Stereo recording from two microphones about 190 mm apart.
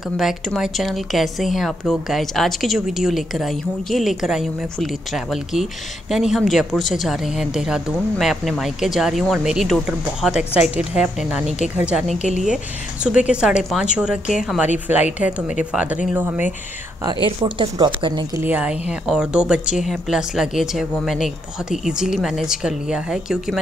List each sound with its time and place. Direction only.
0.2 s speech: centre (ahead or behind)
15.7 s speech: 5° right (ahead or behind)
17.4 s speech: 25° right (ahead or behind)
18.4 s speech: 10° right (ahead or behind)